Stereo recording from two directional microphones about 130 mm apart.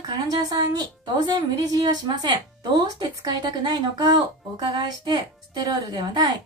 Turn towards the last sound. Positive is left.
turn(degrees=-35)  # may be behind; listen again after turning